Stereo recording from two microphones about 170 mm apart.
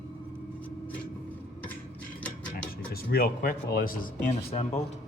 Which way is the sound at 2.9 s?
65° left (ahead or behind).